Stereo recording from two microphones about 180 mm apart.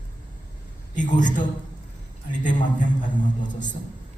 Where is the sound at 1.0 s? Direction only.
45° left (ahead or behind).